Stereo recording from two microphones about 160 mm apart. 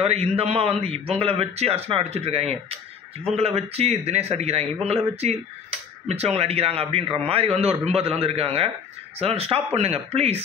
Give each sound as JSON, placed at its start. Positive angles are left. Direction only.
{"t": 0.0, "sound": "a man's voice", "side_deg": -40}